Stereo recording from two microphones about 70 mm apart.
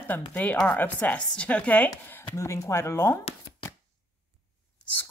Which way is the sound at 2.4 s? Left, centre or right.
Left.